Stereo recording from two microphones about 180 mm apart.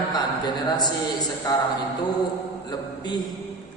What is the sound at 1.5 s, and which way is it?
Speech, 20° left (ahead or behind).